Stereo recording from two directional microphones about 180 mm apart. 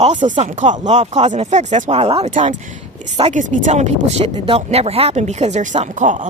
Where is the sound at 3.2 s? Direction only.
40° right (ahead or behind).